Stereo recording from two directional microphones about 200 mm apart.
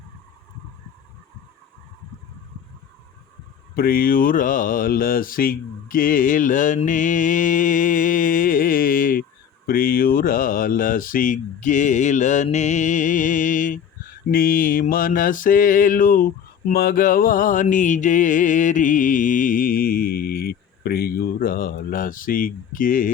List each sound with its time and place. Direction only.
3.8 s mantra: 45° left (ahead or behind)
9.6 s speech: 45° left (ahead or behind)
14.3 s mantra: 45° left (ahead or behind)